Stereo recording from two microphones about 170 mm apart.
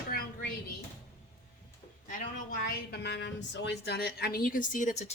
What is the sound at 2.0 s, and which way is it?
Speech, 50° left (ahead or behind).